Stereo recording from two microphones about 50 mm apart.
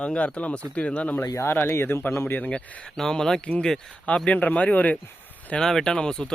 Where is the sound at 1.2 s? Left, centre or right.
Left.